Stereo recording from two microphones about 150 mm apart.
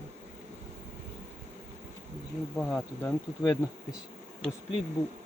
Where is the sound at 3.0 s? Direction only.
25° left (ahead or behind).